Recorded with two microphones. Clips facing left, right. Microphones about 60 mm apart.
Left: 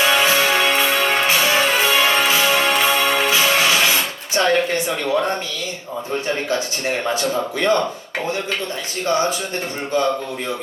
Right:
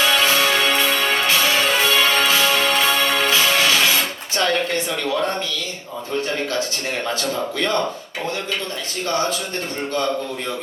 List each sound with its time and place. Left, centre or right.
0.0 s music: centre
6.2 s speech: centre